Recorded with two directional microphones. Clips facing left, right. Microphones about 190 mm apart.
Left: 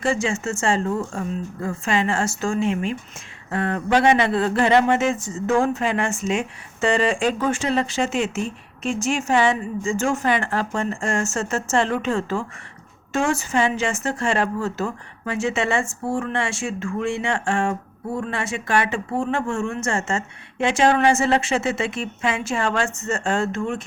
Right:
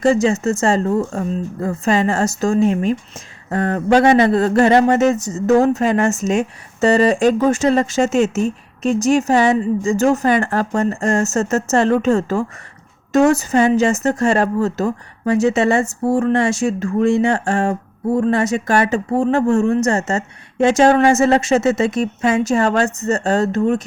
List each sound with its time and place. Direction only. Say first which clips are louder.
0.0 s a woman's voice: right 8 dB; 40° right (ahead or behind)